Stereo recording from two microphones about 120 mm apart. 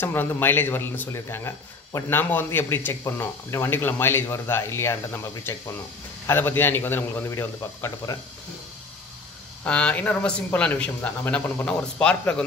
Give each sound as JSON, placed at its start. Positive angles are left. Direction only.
{"t": 0.0, "sound": "a man's voice", "side_deg": 15}
{"t": 9.7, "sound": "a man's voice", "side_deg": 10}